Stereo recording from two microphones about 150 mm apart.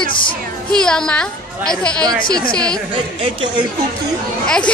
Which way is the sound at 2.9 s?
35° right (ahead or behind).